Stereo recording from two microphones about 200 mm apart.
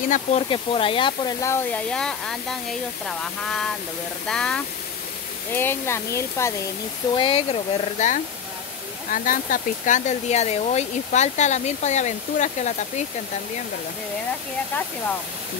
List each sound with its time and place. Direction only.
0.1 s speech: 30° left (ahead or behind); by 6.5 s 15° left (ahead or behind)
7.2 s speech: 25° left (ahead or behind)
9.1 s speech: 45° left (ahead or behind)